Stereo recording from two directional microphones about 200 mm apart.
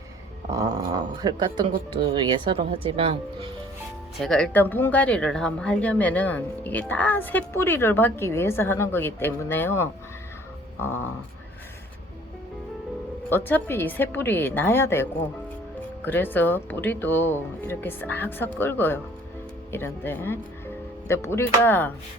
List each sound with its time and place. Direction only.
0.5 s speech: 15° right (ahead or behind)
4.2 s speech: 5° left (ahead or behind)
13.3 s speech: 10° left (ahead or behind)
16.0 s speech: 10° left (ahead or behind)